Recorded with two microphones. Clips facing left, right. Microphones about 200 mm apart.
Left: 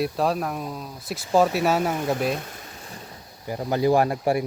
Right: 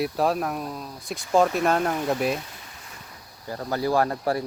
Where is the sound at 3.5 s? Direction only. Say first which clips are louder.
Left 4 dB; 15° left (ahead or behind).